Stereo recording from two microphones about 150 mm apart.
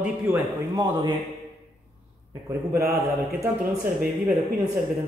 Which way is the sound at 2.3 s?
20° right (ahead or behind).